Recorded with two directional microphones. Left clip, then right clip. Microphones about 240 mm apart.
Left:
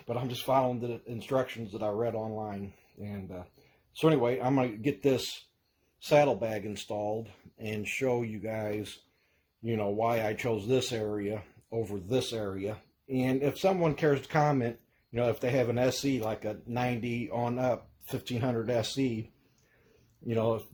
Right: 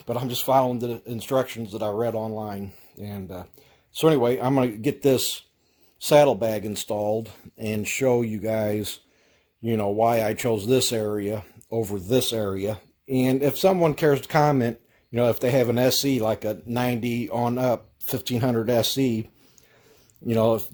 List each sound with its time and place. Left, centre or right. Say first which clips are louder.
0.1 s speech: right 7 dB; right
20.2 s speech: right 8 dB; right